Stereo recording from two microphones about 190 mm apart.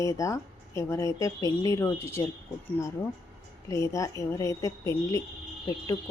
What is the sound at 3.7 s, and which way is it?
Speech, 15° left (ahead or behind).